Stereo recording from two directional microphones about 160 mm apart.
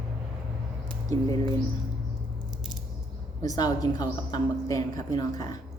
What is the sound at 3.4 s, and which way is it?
A woman's voice, 25° left (ahead or behind).